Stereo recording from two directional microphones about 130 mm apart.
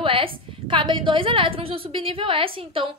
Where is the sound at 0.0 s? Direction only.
45° right (ahead or behind).